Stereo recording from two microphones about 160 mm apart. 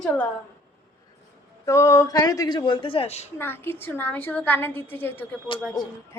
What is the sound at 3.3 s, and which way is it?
A woman's voice, 15° left (ahead or behind).